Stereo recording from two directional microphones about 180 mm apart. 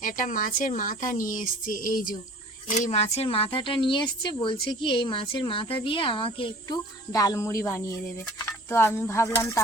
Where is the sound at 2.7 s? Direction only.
40° left (ahead or behind).